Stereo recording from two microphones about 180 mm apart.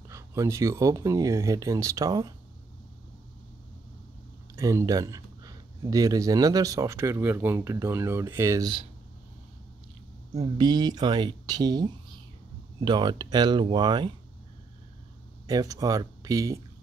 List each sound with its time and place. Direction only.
0.1 s speech: 15° right (ahead or behind)
4.6 s speech: 20° right (ahead or behind)
10.3 s speech: 20° right (ahead or behind)
15.4 s speech: 20° right (ahead or behind)